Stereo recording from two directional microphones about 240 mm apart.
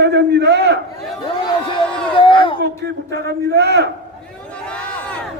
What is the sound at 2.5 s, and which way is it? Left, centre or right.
A man's voice, right.